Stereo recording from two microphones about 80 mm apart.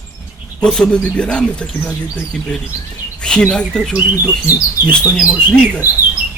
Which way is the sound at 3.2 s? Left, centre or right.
Centre.